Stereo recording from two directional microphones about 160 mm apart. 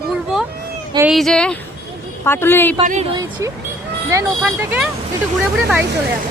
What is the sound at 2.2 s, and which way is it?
Speech, 15° left (ahead or behind).